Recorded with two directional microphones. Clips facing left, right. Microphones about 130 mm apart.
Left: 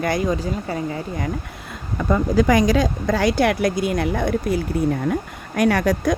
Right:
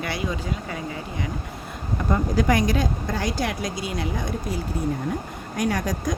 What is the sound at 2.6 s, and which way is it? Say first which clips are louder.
Speech: left 6 dB; 90° left.